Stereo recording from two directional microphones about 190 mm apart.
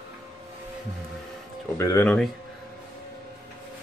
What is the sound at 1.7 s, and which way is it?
Speech, 15° left (ahead or behind).